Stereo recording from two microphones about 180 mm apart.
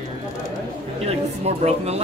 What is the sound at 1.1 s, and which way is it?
Speech, 35° right (ahead or behind).